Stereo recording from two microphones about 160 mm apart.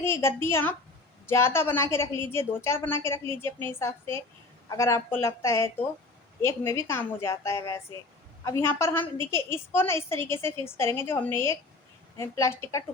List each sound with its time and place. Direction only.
0.0 s a woman's voice: 15° left (ahead or behind)